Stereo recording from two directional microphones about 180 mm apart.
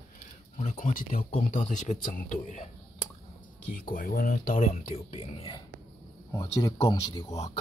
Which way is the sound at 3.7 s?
50° left (ahead or behind).